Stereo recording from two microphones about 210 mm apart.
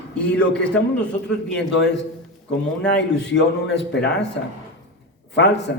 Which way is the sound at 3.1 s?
55° left (ahead or behind).